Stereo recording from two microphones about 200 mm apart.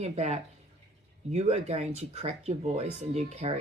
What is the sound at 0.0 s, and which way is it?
Speech, 35° right (ahead or behind).